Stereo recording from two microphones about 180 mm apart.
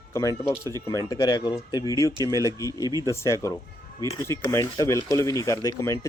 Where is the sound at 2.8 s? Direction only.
20° right (ahead or behind).